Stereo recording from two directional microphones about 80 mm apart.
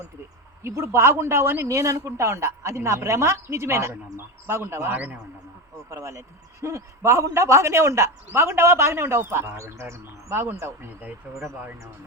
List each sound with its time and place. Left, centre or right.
0.6 s speech: right
1.7 s speech: right
4.9 s a man's voice: centre
5.9 s speech: right